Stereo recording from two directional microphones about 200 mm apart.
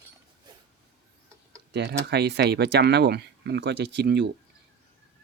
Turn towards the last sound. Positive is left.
turn(degrees=-60)  # may be behind; listen again after turning